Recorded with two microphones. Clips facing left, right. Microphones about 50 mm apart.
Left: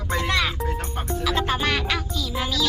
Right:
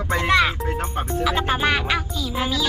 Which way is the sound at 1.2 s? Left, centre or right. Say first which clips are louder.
Right 3 dB; centre.